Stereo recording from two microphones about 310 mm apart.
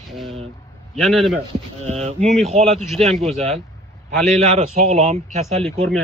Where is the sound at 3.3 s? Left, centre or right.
Right.